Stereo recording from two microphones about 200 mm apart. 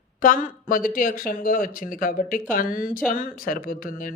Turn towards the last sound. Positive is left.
turn(degrees=45)  # may be behind; listen again after turning